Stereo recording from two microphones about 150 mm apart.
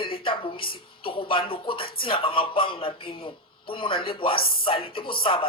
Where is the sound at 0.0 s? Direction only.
35° left (ahead or behind).